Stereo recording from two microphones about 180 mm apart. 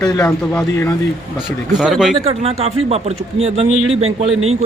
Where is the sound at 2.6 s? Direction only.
35° right (ahead or behind).